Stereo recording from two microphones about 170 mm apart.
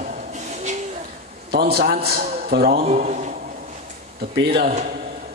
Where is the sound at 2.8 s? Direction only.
45° right (ahead or behind).